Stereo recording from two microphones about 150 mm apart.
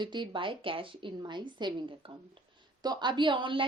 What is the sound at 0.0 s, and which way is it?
Speech, 30° right (ahead or behind).